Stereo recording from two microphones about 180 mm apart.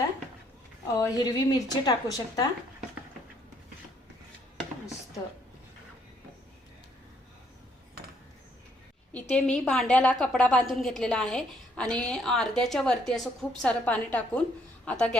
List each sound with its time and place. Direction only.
0.9 s speech: 20° left (ahead or behind)
9.3 s a woman's voice: 5° left (ahead or behind)